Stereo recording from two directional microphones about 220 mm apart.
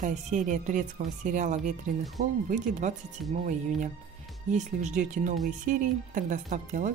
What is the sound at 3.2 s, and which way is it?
Speech, centre (ahead or behind).